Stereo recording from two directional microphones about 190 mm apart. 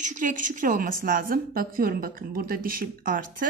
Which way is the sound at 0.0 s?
40° right (ahead or behind).